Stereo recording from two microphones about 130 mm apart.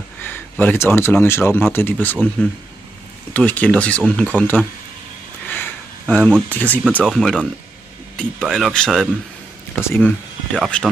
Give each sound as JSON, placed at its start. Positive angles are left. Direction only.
{"t": 0.2, "sound": "speech", "side_deg": 15}
{"t": 3.3, "sound": "speech", "side_deg": 10}
{"t": 5.5, "sound": "a sound", "side_deg": 10}
{"t": 6.5, "sound": "speech", "side_deg": 10}
{"t": 9.8, "sound": "speech", "side_deg": 15}